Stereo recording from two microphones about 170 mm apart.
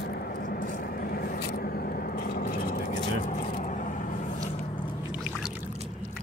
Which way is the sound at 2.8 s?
45° left (ahead or behind).